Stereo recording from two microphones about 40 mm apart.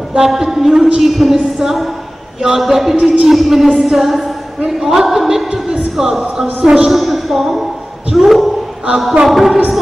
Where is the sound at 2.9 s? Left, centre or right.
Right.